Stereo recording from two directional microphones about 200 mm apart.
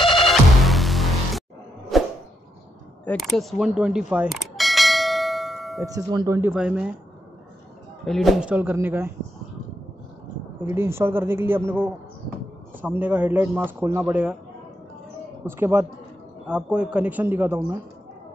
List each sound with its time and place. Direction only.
0.3 s music: centre (ahead or behind)
1.9 s a sound: centre (ahead or behind)
3.1 s speech: centre (ahead or behind)
4.1 s bell: 5° right (ahead or behind)
5.9 s a man's voice: 15° right (ahead or behind)
6.5 s a man's voice: 5° right (ahead or behind)
8.0 s a man's voice: centre (ahead or behind)
10.6 s a man's voice: 10° right (ahead or behind)
15.4 s a man's voice: 10° right (ahead or behind)